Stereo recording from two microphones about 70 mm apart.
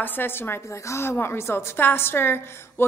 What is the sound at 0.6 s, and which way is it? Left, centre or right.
A woman's voice, left.